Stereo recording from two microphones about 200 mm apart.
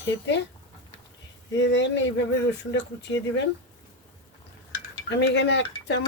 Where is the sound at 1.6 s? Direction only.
65° left (ahead or behind).